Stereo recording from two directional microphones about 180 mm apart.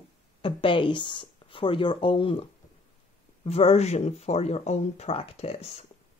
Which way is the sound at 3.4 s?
35° left (ahead or behind).